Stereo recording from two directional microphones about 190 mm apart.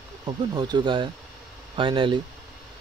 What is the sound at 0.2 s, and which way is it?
Speech, 20° right (ahead or behind).